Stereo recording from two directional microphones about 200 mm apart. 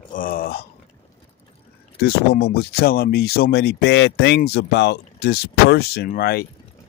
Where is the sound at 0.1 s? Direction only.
45° left (ahead or behind).